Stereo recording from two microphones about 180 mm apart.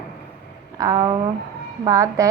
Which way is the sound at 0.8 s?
20° right (ahead or behind).